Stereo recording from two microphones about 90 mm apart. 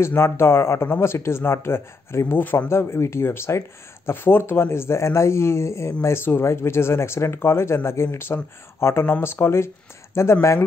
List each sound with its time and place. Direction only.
0.0 s speech: 25° left (ahead or behind)